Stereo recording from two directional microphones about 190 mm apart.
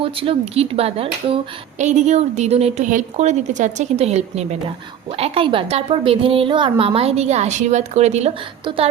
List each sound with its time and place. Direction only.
0.0 s a woman's voice: 30° right (ahead or behind)